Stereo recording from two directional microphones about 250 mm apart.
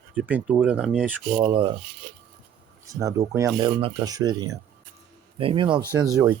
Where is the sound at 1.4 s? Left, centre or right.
Centre.